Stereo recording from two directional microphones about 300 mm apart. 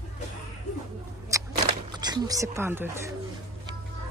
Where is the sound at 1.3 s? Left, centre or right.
Centre.